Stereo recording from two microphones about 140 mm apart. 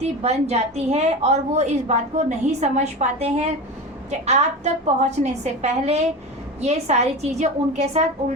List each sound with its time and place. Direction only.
0.0 s a woman's voice: 50° right (ahead or behind)